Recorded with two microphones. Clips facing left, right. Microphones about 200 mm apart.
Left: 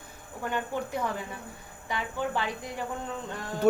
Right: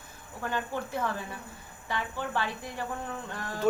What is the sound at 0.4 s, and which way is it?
A woman's voice, 15° left (ahead or behind).